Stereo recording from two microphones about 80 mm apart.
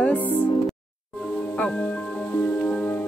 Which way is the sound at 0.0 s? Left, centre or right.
Left.